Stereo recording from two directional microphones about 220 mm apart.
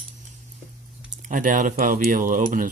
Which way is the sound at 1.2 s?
35° right (ahead or behind).